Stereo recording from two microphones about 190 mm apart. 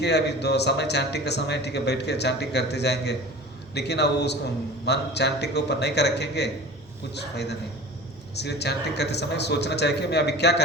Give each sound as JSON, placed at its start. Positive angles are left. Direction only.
{"t": 0.0, "sound": "a man's voice", "side_deg": 60}